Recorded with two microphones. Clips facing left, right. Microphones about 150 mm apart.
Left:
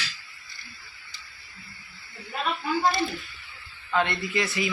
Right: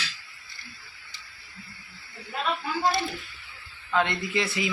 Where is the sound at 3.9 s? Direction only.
15° right (ahead or behind).